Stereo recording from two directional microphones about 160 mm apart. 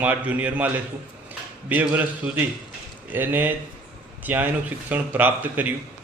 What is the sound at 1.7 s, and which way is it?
A man's voice, 10° right (ahead or behind).